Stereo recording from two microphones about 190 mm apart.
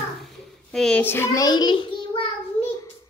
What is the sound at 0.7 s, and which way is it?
Speech, 5° left (ahead or behind).